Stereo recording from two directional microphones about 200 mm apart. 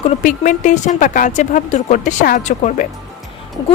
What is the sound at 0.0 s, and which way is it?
A woman's voice, 40° left (ahead or behind).